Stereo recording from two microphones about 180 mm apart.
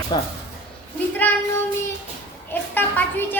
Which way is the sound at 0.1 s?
25° left (ahead or behind).